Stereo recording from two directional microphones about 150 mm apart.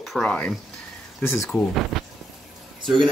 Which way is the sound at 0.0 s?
Centre (ahead or behind).